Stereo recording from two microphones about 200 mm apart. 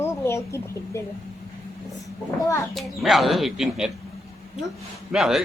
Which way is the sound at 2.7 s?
Centre (ahead or behind).